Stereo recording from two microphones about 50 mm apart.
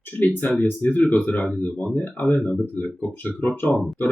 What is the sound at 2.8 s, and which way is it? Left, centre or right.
Speech, left.